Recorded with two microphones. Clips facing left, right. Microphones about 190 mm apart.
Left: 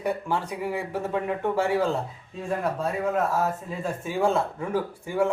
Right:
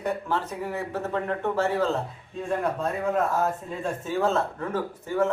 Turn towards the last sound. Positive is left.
turn(degrees=10)  # may be behind; listen again after turning